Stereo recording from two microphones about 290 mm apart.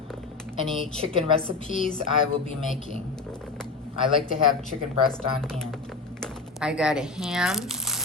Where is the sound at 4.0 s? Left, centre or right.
Centre.